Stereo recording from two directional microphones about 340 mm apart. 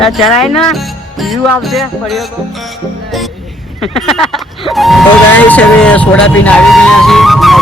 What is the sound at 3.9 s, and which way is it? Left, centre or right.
Music, centre.